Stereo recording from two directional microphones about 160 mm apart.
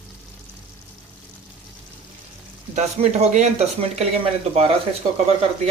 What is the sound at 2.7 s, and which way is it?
Speech, 45° right (ahead or behind).